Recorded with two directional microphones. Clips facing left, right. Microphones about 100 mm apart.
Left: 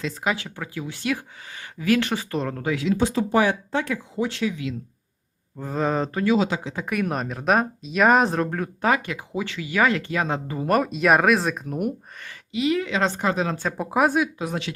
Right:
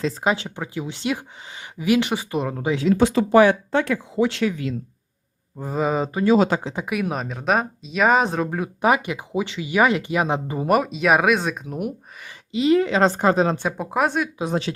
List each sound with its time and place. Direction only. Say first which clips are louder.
0.0 s speech: right 4 dB; 30° right (ahead or behind); by 2.7 s 15° right (ahead or behind)
3.0 s speech: right 7 dB; 85° right
4.4 s speech: right 3 dB; 45° right (ahead or behind)
5.5 s speech: right 1 dB; 10° right (ahead or behind)
6.5 s speech: right 5 dB; 50° right (ahead or behind)
6.8 s speech: even; 5° right (ahead or behind)
10.8 s speech: left 1 dB; centre (ahead or behind)
12.5 s speech: right 5 dB; 30° right (ahead or behind)
13.7 s speech: left 1 dB; centre (ahead or behind)
14.3 s speech: right 4 dB; 25° right (ahead or behind)